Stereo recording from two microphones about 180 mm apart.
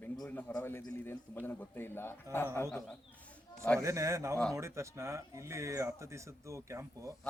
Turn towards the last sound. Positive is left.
turn(degrees=-15)  # may be behind; listen again after turning